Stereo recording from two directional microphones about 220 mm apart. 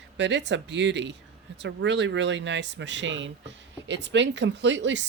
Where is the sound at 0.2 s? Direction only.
55° right (ahead or behind).